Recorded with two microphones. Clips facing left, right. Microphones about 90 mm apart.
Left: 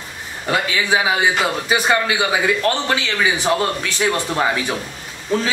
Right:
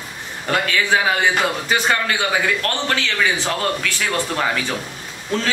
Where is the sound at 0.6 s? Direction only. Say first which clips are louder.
Right 2 dB; 10° left (ahead or behind).